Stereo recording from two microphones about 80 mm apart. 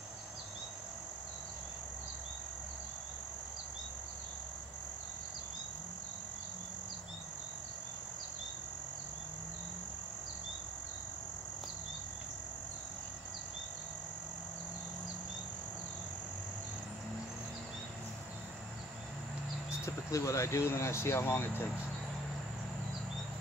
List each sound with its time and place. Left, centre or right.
19.8 s speech: left